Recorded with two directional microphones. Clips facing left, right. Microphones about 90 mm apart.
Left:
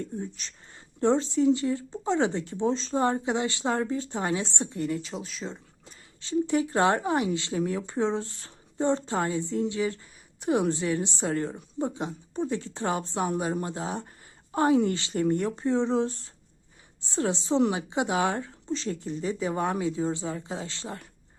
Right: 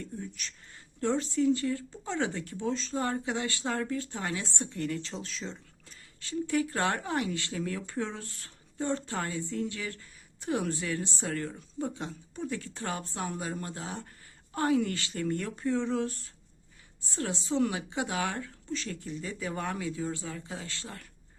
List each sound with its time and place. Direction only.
0.0 s speech: 30° left (ahead or behind)